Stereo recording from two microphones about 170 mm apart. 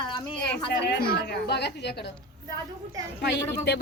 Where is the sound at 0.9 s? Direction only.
70° left (ahead or behind).